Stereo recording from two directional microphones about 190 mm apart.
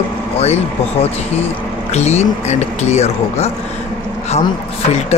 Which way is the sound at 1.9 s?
35° left (ahead or behind).